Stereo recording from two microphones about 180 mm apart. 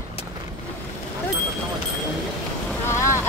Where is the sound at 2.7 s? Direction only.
15° left (ahead or behind).